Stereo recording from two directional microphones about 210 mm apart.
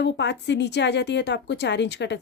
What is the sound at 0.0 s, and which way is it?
A woman's voice, 55° left (ahead or behind).